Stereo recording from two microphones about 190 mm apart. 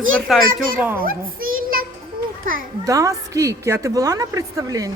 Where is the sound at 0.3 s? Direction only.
Centre (ahead or behind).